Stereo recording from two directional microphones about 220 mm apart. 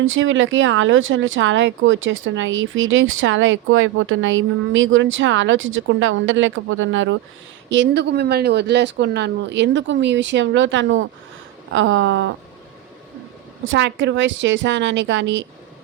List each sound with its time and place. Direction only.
0.0 s speech: 60° right (ahead or behind)
13.7 s speech: 55° right (ahead or behind)